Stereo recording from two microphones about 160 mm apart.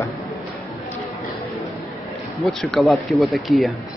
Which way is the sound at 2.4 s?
Centre (ahead or behind).